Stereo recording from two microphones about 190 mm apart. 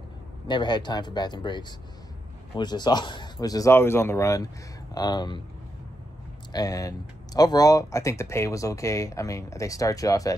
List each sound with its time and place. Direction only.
0.5 s speech: 25° left (ahead or behind)
6.5 s speech: 20° left (ahead or behind)